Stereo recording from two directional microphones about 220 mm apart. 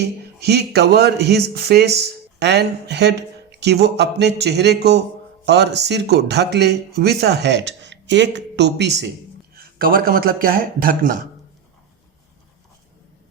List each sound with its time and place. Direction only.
0.0 s speech: 50° right (ahead or behind)
9.6 s speech: 40° right (ahead or behind)